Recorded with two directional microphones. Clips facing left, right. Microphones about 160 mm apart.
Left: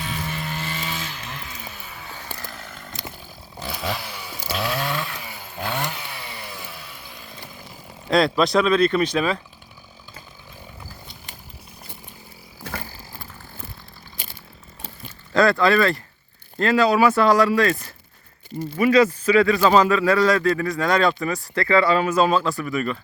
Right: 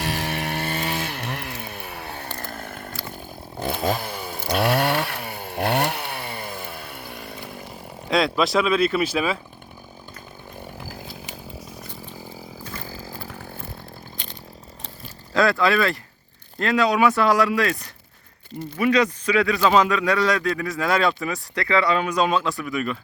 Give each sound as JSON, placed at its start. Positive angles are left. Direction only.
{"t": 0.0, "sound": "chainsaw", "side_deg": -75}
{"t": 8.1, "sound": "speech", "side_deg": 0}
{"t": 10.8, "sound": "chainsaw", "side_deg": -90}
{"t": 13.2, "sound": "chainsaw", "side_deg": -75}
{"t": 14.2, "sound": "chainsaw", "side_deg": 5}
{"t": 15.3, "sound": "speech", "side_deg": 0}